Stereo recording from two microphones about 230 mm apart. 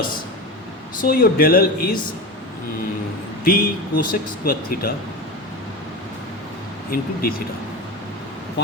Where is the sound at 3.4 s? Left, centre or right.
Left.